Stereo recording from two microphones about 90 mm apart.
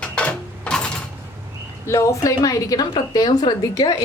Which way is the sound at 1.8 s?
35° left (ahead or behind).